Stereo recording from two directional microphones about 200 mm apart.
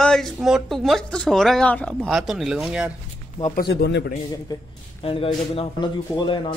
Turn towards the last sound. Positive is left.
turn(degrees=25)  # may be behind; listen again after turning